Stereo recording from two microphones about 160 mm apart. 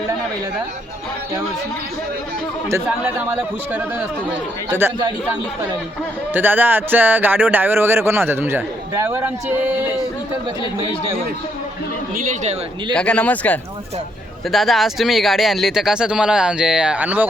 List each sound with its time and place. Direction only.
3.0 s speech: 10° right (ahead or behind)
6.3 s speech: 10° right (ahead or behind)
12.1 s speech: 50° right (ahead or behind)
12.9 s speech: 5° left (ahead or behind); by 17.2 s 10° right (ahead or behind)